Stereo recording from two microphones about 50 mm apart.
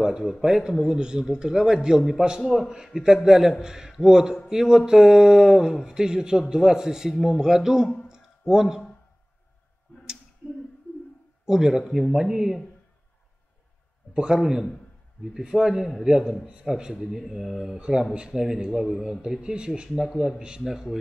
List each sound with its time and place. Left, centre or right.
0.2 s a man's voice: centre
8.1 s a sound: centre
11.4 s a man's voice: centre
14.1 s a man's voice: centre
14.4 s a man's voice: centre
17.1 s speech: centre
17.7 s a man's voice: centre
19.2 s a man's voice: centre
20.0 s a man's voice: centre